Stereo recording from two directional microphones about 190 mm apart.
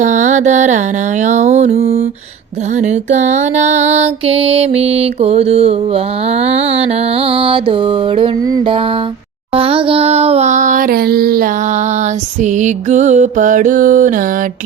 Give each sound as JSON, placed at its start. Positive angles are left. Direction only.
{"t": 0.0, "sound": "music", "side_deg": -40}
{"t": 12.4, "sound": "music", "side_deg": -40}